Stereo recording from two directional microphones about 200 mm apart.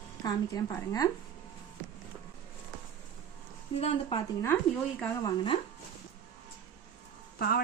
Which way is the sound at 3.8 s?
25° left (ahead or behind).